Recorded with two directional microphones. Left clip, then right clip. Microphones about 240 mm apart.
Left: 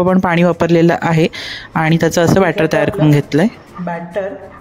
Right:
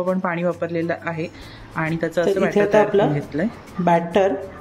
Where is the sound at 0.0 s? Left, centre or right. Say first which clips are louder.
Left 9 dB; left.